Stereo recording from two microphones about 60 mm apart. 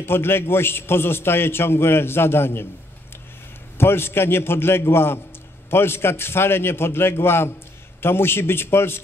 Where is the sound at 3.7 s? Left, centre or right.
Left.